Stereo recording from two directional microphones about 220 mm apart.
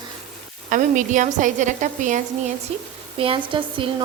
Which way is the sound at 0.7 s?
35° right (ahead or behind).